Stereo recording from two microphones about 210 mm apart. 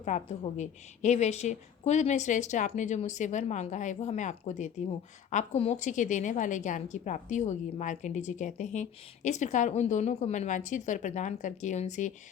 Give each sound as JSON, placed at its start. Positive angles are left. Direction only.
{"t": 0.0, "sound": "a woman's voice", "side_deg": 35}